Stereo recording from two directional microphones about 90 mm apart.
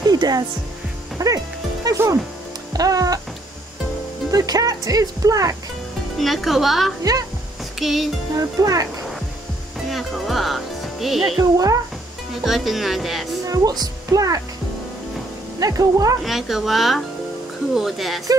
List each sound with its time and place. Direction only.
0.0 s music: 50° right (ahead or behind)
4.3 s speech: 40° right (ahead or behind)
6.1 s speech: centre (ahead or behind)
7.0 s music: 45° right (ahead or behind)
7.8 s speech: centre (ahead or behind)
8.4 s speech: 40° right (ahead or behind)
9.8 s music: centre (ahead or behind)
11.3 s speech: 40° right (ahead or behind)
12.4 s speech: centre (ahead or behind)
13.5 s speech: 45° right (ahead or behind)
15.6 s speech: 40° right (ahead or behind)
16.3 s speech: 5° right (ahead or behind)